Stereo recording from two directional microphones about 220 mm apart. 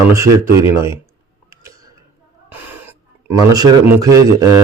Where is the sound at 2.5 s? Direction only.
10° right (ahead or behind).